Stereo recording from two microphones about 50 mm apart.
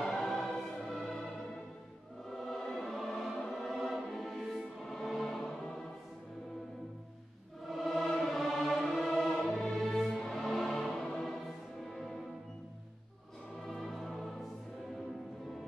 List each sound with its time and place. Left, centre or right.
0.0 s music: centre
2.2 s music: centre
7.6 s music: centre
13.7 s music: centre